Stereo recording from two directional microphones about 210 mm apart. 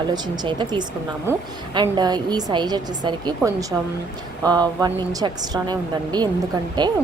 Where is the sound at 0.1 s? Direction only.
20° right (ahead or behind).